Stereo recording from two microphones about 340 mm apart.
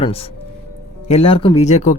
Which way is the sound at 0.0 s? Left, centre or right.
Centre.